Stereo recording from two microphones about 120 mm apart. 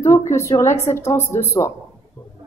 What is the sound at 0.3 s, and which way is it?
A woman's voice, 25° left (ahead or behind).